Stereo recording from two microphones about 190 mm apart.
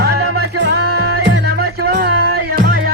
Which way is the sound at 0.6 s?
60° right (ahead or behind).